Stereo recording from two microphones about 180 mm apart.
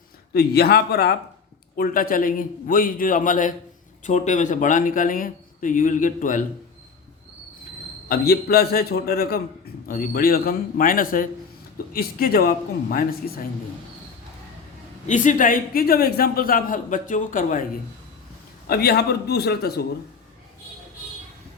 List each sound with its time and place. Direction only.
0.3 s a man's voice: 60° left (ahead or behind)
8.0 s a man's voice: 60° left (ahead or behind)
15.0 s a man's voice: 45° left (ahead or behind)
18.7 s speech: 60° left (ahead or behind)